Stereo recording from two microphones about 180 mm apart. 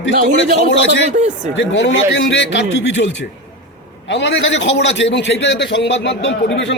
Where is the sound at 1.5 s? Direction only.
85° left.